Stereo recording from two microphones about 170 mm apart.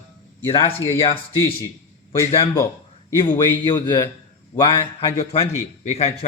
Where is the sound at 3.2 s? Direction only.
25° left (ahead or behind); by 6.1 s 40° left (ahead or behind).